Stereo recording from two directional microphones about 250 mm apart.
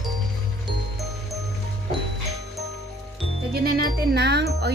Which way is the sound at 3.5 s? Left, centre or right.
Right.